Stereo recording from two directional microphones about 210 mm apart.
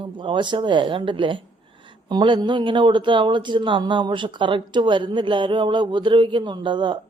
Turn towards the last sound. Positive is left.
turn(degrees=-20)  # may be behind; listen again after turning